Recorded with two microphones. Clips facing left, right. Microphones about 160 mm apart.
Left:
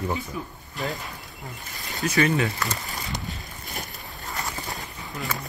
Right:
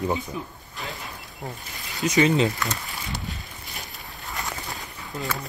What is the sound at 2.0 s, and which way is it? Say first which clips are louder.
Speech: right 3 dB; 20° right (ahead or behind).